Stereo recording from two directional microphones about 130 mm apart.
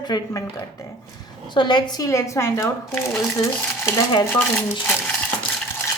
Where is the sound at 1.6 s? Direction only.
35° left (ahead or behind); by 3.4 s 20° left (ahead or behind).